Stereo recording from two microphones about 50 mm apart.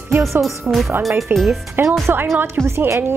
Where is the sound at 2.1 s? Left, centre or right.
Right.